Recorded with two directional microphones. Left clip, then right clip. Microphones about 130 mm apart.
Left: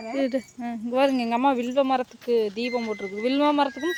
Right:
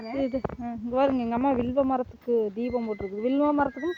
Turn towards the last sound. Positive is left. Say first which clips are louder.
# left 3 dB
turn(degrees=50)  # may be behind; listen again after turning